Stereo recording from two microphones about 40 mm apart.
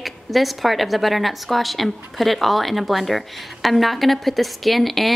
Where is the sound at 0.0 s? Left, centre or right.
Centre.